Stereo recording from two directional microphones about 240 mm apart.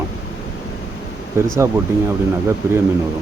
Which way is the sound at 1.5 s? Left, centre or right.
Centre.